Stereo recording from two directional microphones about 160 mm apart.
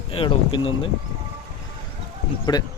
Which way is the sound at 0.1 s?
35° left (ahead or behind).